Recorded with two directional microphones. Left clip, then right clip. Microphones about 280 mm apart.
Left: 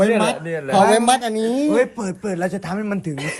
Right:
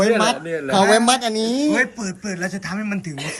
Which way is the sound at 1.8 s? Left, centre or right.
Centre.